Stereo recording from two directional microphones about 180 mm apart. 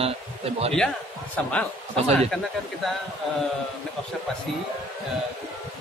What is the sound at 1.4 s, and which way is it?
Speech, 5° left (ahead or behind).